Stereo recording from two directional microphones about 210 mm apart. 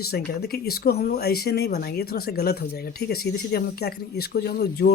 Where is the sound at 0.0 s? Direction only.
50° left (ahead or behind).